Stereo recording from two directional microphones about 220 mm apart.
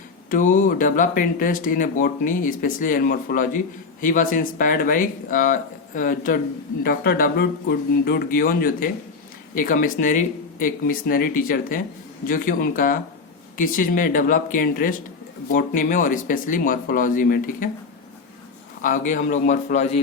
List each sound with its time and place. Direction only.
0.3 s speech: 35° left (ahead or behind)
18.8 s speech: 35° left (ahead or behind)